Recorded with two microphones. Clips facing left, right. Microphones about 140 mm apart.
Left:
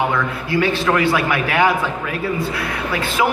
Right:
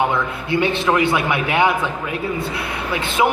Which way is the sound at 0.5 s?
25° right (ahead or behind).